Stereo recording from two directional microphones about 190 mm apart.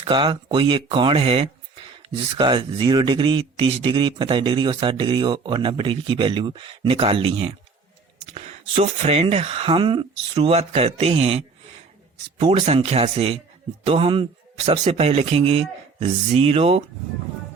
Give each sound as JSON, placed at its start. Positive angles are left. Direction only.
{"t": 0.0, "sound": "speech", "side_deg": -25}